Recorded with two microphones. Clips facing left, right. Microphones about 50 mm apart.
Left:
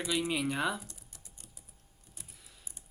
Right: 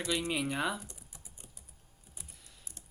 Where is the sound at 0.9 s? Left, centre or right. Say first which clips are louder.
Right 1 dB; centre.